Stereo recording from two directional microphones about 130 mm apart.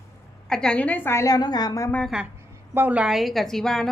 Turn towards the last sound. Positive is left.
turn(degrees=0)  # may be behind; listen again after turning